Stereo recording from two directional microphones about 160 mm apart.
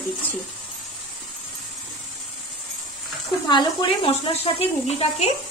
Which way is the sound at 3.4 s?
30° left (ahead or behind).